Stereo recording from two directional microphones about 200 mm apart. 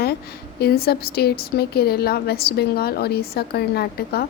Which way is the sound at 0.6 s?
50° left (ahead or behind).